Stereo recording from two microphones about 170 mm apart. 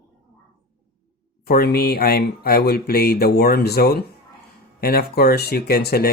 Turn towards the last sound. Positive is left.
turn(degrees=65)  # may be behind; listen again after turning